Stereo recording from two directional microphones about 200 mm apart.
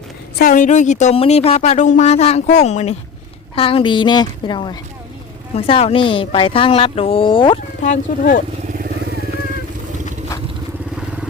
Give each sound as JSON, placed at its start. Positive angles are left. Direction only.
{"t": 0.3, "sound": "a woman's voice", "side_deg": 45}
{"t": 7.8, "sound": "a woman's voice", "side_deg": 40}